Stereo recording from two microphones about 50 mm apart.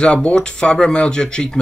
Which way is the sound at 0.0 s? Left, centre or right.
Left.